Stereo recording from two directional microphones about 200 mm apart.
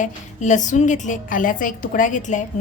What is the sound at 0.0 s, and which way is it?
A woman's voice, 40° left (ahead or behind).